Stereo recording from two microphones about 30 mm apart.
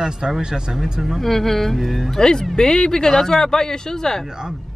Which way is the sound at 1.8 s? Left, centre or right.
Centre.